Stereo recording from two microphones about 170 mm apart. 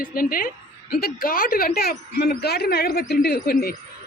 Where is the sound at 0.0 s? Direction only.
55° left (ahead or behind).